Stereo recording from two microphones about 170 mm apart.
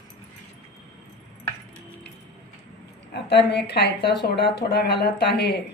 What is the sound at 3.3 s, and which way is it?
Speech, 80° left.